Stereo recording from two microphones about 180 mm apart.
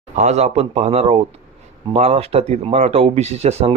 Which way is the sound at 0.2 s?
40° right (ahead or behind).